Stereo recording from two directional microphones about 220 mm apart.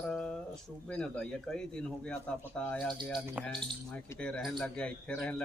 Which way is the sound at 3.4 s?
5° left (ahead or behind).